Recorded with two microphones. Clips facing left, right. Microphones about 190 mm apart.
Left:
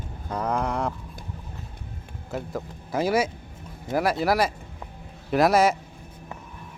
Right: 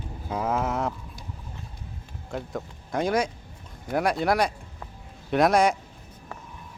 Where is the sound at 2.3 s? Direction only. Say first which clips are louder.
Left 1 dB; 5° left (ahead or behind).